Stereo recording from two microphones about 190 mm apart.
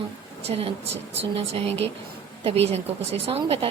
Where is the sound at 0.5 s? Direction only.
30° right (ahead or behind).